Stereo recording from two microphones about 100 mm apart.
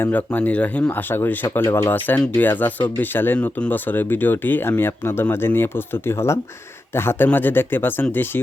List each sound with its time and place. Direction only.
0.0 s speech: 15° left (ahead or behind)